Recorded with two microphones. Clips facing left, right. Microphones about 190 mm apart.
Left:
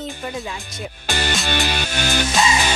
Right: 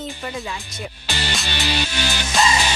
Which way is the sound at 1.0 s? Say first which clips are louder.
Left 5 dB; 50° left (ahead or behind).